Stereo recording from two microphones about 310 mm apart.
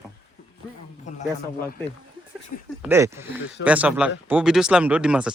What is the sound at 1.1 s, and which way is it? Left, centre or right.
Speech, left.